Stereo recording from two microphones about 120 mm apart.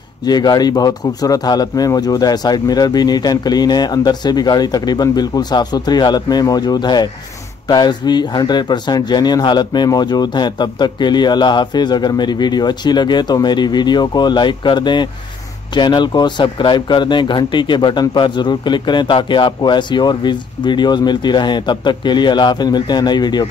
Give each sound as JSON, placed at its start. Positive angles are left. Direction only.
{"t": 0.2, "sound": "speech", "side_deg": 35}